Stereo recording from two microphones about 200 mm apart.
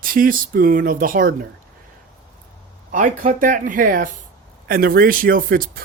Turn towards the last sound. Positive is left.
turn(degrees=-45)  # may be behind; listen again after turning